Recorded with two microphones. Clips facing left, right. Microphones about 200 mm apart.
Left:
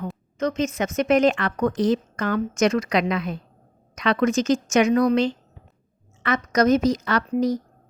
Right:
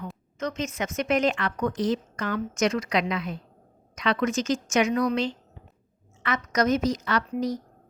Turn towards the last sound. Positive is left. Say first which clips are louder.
# left 5 dB
turn(degrees=40)  # may be behind; listen again after turning